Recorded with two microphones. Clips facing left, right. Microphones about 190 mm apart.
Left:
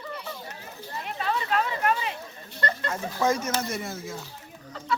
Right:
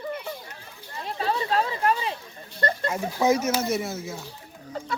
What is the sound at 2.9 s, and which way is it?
Speech, 10° right (ahead or behind).